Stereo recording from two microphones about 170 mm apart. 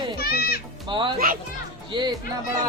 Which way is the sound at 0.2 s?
65° left (ahead or behind).